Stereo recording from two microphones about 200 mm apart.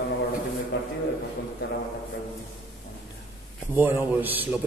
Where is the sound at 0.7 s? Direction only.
60° left (ahead or behind).